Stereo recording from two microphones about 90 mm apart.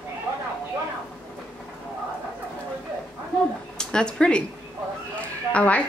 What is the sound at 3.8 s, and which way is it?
Speech, 10° left (ahead or behind).